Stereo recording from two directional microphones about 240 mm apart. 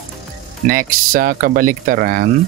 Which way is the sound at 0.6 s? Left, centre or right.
Right.